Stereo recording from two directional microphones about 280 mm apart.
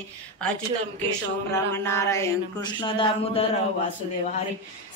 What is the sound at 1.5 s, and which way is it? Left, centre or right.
Mantra, centre.